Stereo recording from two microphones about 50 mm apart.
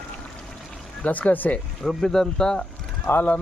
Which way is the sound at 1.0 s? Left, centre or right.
Left.